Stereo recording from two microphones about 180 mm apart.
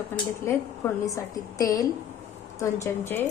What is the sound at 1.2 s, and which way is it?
A woman's voice, 20° left (ahead or behind).